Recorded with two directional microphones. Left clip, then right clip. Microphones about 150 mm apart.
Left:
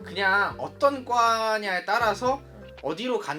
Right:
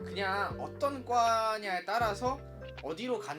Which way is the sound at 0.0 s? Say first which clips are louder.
Left 10 dB; 55° right (ahead or behind).